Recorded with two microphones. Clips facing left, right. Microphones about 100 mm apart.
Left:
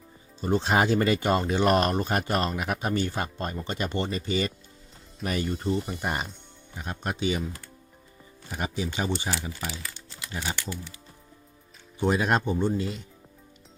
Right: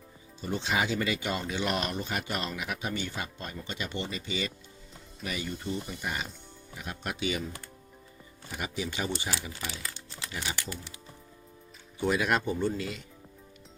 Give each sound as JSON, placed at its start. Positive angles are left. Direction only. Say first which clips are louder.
{"t": 0.4, "sound": "speech", "louder": "left 7 dB", "side_deg": 45}
{"t": 6.7, "sound": "speech", "louder": "left 4 dB", "side_deg": 35}
{"t": 8.5, "sound": "speech", "louder": "left 4 dB", "side_deg": 30}
{"t": 11.9, "sound": "speech", "louder": "left 3 dB", "side_deg": 30}